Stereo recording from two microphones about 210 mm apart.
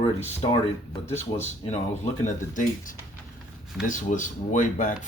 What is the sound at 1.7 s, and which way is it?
Speech, 35° left (ahead or behind).